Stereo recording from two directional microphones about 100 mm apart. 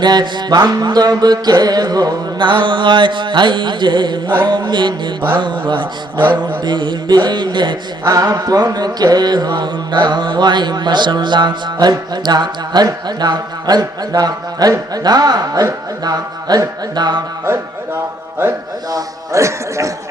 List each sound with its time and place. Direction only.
0.0 s mantra: 45° right (ahead or behind)
8.0 s mantra: 35° right (ahead or behind)
14.7 s a man's voice: 40° right (ahead or behind)
17.4 s speech: 25° right (ahead or behind)
18.9 s a man's voice: 35° right (ahead or behind)